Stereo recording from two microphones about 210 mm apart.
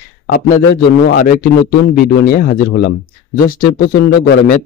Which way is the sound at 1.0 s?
45° left (ahead or behind).